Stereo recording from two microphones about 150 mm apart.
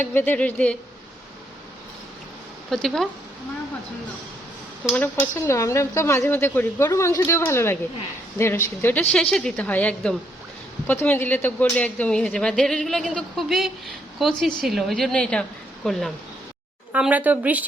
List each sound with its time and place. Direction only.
0.0 s speech: 15° left (ahead or behind)
2.6 s a woman's voice: 5° left (ahead or behind)
4.9 s a woman's voice: 15° left (ahead or behind)
16.9 s a woman's voice: 10° right (ahead or behind)